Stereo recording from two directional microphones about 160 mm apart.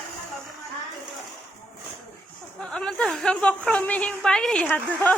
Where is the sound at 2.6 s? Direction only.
5° left (ahead or behind).